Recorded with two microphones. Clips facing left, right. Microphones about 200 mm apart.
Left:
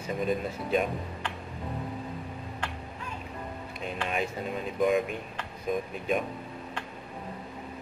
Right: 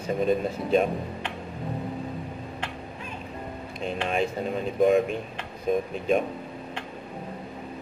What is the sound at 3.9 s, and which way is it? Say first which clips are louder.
Speech: right 5 dB; 30° right (ahead or behind).